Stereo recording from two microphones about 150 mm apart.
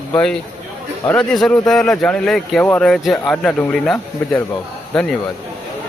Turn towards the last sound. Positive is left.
turn(degrees=5)  # may be behind; listen again after turning